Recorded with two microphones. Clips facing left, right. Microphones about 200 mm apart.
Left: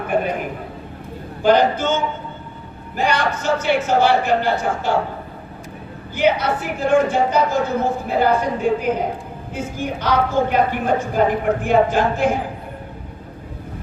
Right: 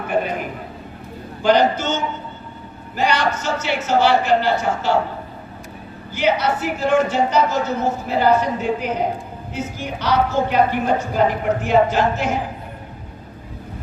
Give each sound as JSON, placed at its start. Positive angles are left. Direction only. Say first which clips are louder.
{"t": 1.4, "sound": "a man's voice", "louder": "left 1 dB", "side_deg": 50}
{"t": 3.0, "sound": "a man's voice", "louder": "even", "side_deg": 55}
{"t": 6.1, "sound": "a woman's voice", "louder": "left 1 dB", "side_deg": 55}